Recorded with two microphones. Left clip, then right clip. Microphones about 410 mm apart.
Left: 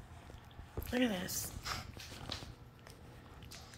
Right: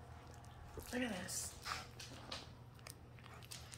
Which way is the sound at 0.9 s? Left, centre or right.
Centre.